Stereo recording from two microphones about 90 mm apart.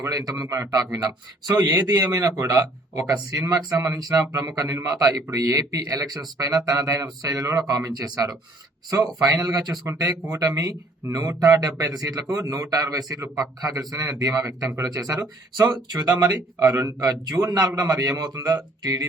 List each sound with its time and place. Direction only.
0.0 s speech: 45° right (ahead or behind)
9.0 s speech: 15° right (ahead or behind)
9.4 s a man's voice: 45° right (ahead or behind)
9.8 s a man's voice: 30° right (ahead or behind)